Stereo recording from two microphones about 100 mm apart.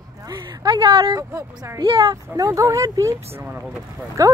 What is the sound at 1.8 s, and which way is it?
Speech, 55° right (ahead or behind).